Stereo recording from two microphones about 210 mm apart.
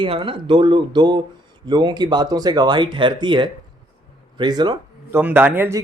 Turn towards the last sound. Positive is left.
turn(degrees=-10)  # may be behind; listen again after turning